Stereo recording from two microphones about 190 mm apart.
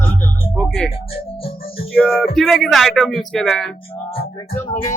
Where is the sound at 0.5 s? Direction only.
5° left (ahead or behind).